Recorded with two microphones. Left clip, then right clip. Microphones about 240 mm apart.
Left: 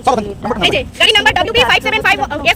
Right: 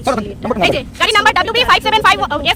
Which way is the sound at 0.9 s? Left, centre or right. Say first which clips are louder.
Left 1 dB; right.